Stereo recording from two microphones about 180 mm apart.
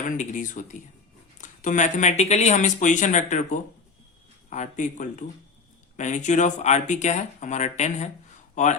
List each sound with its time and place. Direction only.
0.1 s speech: 45° left (ahead or behind)